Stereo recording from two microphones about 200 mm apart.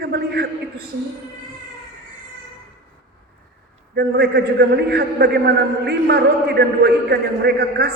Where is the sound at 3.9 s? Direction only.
50° right (ahead or behind).